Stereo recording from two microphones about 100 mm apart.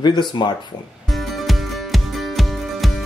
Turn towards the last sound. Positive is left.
turn(degrees=0)  # may be behind; listen again after turning